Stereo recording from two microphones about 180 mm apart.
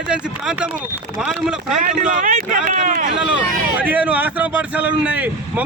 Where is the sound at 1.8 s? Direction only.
45° right (ahead or behind).